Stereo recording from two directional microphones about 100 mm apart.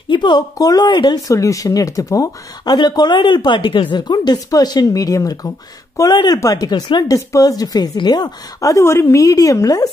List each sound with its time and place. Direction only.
0.1 s speech: 50° left (ahead or behind)